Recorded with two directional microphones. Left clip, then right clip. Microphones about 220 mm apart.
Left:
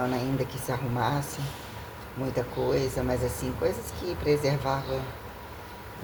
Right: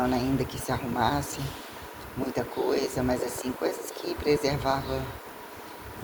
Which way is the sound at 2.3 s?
30° right (ahead or behind).